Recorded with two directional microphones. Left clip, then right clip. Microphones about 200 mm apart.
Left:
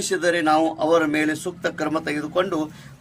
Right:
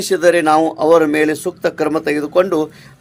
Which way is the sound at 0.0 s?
35° right (ahead or behind).